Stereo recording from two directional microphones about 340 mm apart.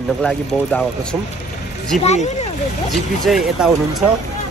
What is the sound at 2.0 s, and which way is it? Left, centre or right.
Speech, centre.